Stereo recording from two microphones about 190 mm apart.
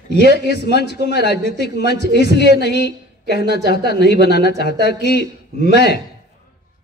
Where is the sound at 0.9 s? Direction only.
60° left (ahead or behind).